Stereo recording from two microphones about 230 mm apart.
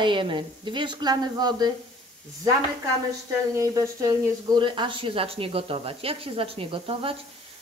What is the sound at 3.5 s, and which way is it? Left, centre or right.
Speech, centre.